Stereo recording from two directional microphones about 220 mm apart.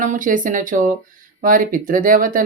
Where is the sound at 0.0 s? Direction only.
35° right (ahead or behind).